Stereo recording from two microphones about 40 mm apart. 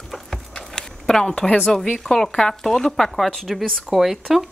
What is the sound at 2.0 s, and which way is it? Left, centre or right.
Speech, centre.